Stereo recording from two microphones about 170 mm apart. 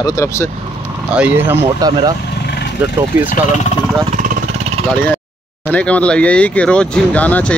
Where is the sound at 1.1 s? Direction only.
10° right (ahead or behind).